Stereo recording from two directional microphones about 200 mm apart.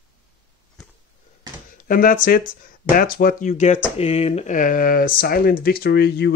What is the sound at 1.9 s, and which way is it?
Speech, 45° left (ahead or behind).